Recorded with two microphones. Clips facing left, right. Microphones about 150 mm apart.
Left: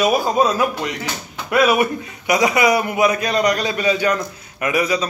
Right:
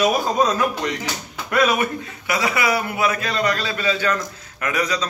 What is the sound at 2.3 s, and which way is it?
A man's voice, 15° left (ahead or behind).